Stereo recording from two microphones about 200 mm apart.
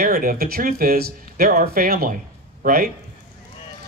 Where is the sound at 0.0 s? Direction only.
45° right (ahead or behind).